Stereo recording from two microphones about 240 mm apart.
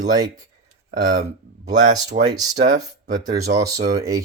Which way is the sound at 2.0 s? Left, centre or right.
Right.